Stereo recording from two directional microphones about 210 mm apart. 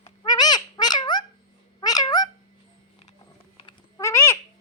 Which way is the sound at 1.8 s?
20° left (ahead or behind).